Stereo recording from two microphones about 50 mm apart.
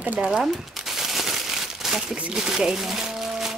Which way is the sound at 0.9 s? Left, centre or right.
Centre.